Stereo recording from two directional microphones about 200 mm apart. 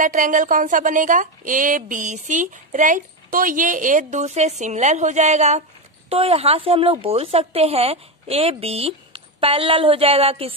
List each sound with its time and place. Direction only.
0.0 s a woman's voice: 40° right (ahead or behind)